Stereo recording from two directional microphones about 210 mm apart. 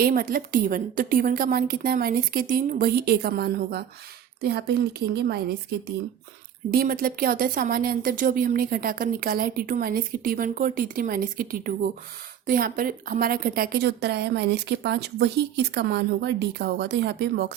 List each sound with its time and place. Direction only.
0.0 s a woman's voice: 45° right (ahead or behind)
6.7 s a woman's voice: 45° right (ahead or behind)